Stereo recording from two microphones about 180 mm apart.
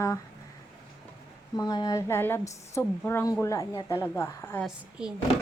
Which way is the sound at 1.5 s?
20° left (ahead or behind).